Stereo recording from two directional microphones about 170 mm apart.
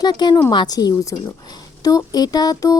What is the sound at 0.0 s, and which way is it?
A woman's voice, 25° left (ahead or behind).